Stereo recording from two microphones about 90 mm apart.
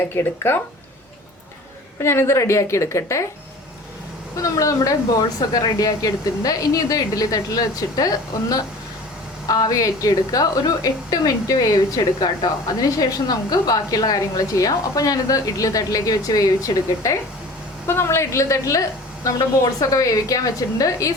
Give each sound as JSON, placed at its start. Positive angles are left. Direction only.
{"t": 0.1, "sound": "speech", "side_deg": 25}
{"t": 2.0, "sound": "a woman's voice", "side_deg": 30}
{"t": 4.4, "sound": "a woman's voice", "side_deg": 40}